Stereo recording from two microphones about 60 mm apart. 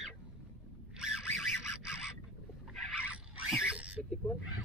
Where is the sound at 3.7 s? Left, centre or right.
Right.